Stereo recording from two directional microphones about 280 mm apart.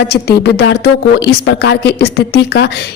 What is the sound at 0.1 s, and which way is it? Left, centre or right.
A woman's voice, left.